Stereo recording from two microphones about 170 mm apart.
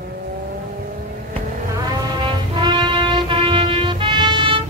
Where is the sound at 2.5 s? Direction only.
30° right (ahead or behind).